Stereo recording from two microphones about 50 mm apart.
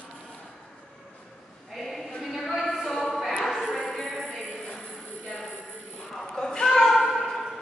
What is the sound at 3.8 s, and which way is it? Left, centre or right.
Music, centre.